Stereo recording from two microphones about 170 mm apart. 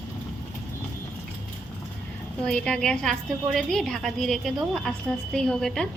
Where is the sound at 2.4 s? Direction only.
5° left (ahead or behind).